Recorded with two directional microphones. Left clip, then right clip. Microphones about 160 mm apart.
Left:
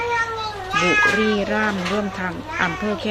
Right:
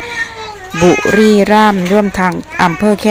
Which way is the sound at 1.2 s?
40° right (ahead or behind).